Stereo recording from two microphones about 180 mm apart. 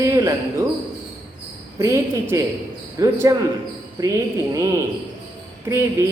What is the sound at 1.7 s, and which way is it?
A man's voice, 15° right (ahead or behind).